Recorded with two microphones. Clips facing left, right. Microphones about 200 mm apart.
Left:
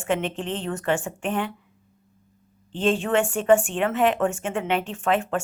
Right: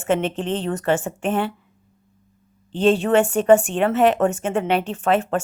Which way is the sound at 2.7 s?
40° right (ahead or behind).